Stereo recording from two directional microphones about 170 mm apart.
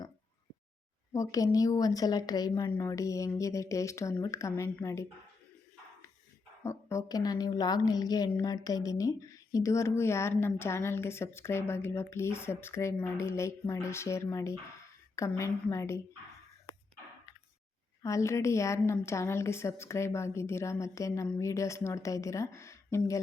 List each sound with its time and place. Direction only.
1.1 s a woman's voice: 20° left (ahead or behind)
6.6 s a woman's voice: 15° left (ahead or behind)
18.0 s a woman's voice: 20° left (ahead or behind)